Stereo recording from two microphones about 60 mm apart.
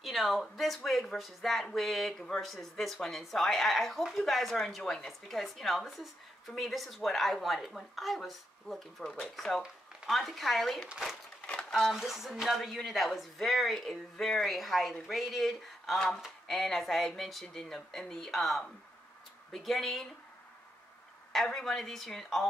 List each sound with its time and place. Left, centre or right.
0.0 s speech: centre
11.9 s speech: centre
21.3 s speech: centre